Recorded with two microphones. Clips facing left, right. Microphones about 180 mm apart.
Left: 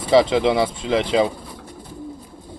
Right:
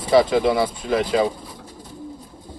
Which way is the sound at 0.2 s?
25° left (ahead or behind).